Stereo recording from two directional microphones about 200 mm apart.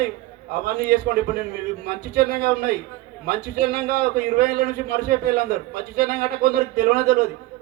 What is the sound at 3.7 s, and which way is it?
A man's voice, 50° right (ahead or behind).